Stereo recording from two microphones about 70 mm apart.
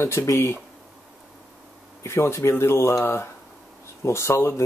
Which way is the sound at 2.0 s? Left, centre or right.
Left.